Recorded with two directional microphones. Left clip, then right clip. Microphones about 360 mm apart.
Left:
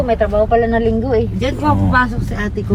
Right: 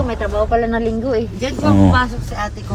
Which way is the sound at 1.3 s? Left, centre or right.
Centre.